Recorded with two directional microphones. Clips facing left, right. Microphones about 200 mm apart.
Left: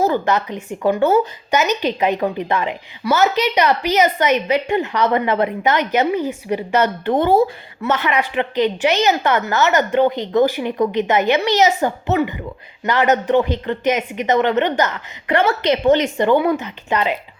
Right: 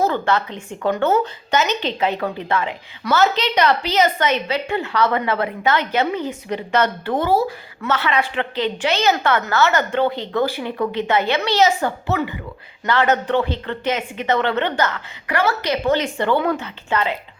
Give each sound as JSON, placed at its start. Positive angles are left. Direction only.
{"t": 0.0, "sound": "a woman's voice", "side_deg": 15}
{"t": 7.0, "sound": "a woman's voice", "side_deg": 25}